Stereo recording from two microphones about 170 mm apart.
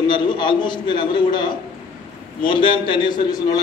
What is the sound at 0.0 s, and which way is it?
A man's voice, 30° left (ahead or behind).